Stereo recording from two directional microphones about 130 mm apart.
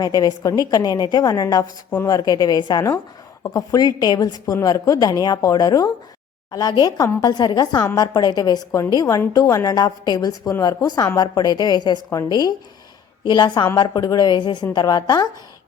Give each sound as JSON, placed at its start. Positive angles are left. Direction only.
{"t": 0.0, "sound": "a woman's voice", "side_deg": 30}